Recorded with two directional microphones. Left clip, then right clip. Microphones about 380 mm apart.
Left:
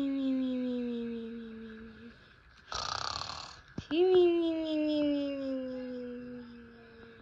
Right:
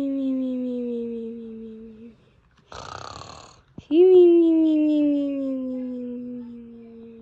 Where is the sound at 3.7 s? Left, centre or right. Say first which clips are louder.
Right 11 dB; centre.